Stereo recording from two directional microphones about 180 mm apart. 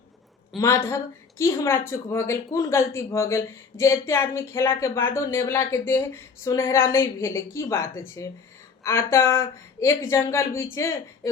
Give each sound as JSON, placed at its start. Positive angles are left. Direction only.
{"t": 0.5, "sound": "a woman's voice", "side_deg": 0}
{"t": 1.4, "sound": "speech", "side_deg": 15}